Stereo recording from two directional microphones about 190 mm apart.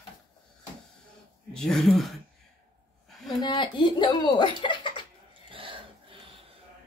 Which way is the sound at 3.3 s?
25° left (ahead or behind).